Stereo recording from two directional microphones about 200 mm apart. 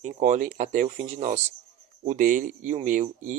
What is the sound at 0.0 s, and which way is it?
Speech, 40° right (ahead or behind).